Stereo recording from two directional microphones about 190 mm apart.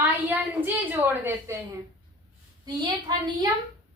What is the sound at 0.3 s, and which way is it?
A woman's voice, 10° right (ahead or behind).